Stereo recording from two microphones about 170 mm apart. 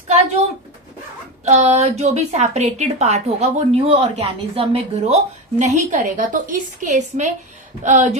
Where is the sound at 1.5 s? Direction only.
40° right (ahead or behind).